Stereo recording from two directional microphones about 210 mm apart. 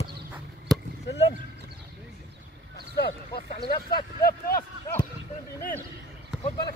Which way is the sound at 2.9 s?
50° left (ahead or behind).